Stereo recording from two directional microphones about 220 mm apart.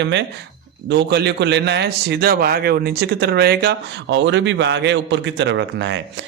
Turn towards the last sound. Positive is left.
turn(degrees=-55)  # may be behind; listen again after turning